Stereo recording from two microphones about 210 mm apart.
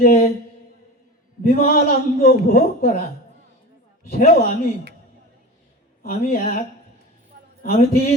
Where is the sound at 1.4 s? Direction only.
45° left (ahead or behind).